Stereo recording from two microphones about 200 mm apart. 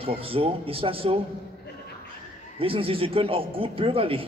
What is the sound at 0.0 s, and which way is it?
A man's voice, 30° right (ahead or behind).